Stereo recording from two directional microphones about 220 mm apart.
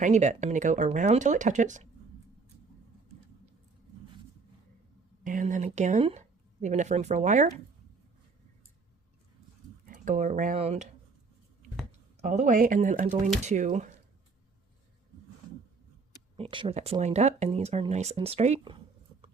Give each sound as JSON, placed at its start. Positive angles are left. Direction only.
{"t": 0.0, "sound": "speech", "side_deg": -35}
{"t": 5.2, "sound": "speech", "side_deg": -35}
{"t": 9.8, "sound": "speech", "side_deg": -35}
{"t": 11.9, "sound": "speech", "side_deg": -35}
{"t": 16.4, "sound": "speech", "side_deg": -25}